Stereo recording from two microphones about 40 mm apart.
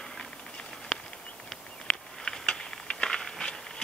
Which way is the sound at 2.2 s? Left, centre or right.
Centre.